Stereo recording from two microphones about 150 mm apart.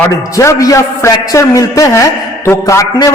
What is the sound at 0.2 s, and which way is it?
A man's voice, 20° left (ahead or behind).